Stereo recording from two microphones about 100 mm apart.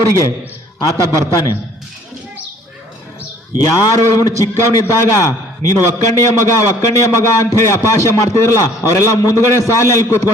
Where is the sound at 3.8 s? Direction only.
35° left (ahead or behind).